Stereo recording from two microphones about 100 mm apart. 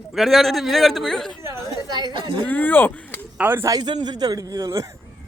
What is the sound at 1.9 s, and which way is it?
Speech, 45° right (ahead or behind).